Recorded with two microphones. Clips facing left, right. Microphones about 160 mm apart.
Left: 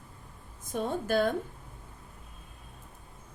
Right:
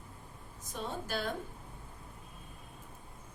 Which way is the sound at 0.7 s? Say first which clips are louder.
Left 9 dB; 50° left (ahead or behind).